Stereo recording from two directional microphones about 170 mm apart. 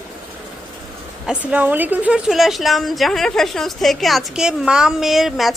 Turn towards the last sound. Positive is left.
turn(degrees=0)  # may be behind; listen again after turning